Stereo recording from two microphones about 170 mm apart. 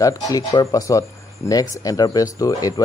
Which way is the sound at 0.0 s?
20° left (ahead or behind).